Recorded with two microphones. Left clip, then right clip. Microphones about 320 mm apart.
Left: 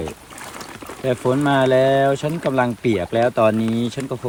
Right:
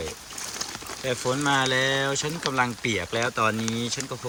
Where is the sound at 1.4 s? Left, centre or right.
Centre.